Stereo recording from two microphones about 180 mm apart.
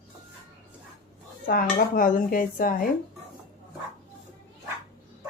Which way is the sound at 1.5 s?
50° left (ahead or behind).